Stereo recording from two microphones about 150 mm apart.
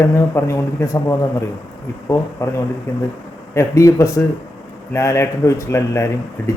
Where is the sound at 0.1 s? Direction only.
20° left (ahead or behind).